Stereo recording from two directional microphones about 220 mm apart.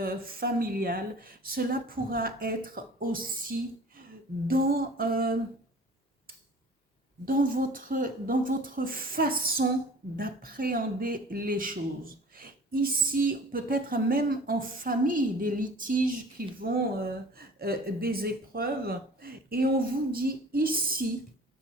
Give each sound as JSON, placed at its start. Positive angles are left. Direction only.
{"t": 0.0, "sound": "speech", "side_deg": -40}
{"t": 7.3, "sound": "speech", "side_deg": -40}